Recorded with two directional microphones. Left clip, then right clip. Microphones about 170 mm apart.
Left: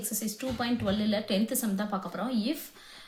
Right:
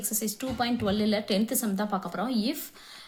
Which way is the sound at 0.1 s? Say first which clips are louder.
Right 2 dB; 35° right (ahead or behind).